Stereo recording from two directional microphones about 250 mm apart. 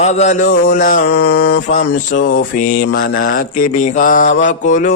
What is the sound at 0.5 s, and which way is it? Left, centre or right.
Mantra, left.